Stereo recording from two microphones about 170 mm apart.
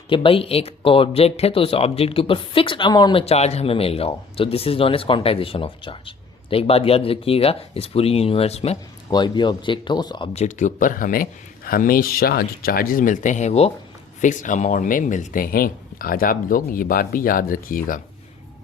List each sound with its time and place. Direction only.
0.1 s speech: 30° left (ahead or behind)
9.0 s speech: 25° left (ahead or behind)
10.3 s speech: 45° left (ahead or behind)